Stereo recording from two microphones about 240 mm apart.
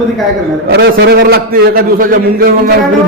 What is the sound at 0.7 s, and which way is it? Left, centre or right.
A man's voice, right.